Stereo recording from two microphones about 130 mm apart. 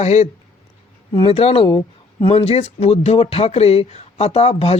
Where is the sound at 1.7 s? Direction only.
35° left (ahead or behind).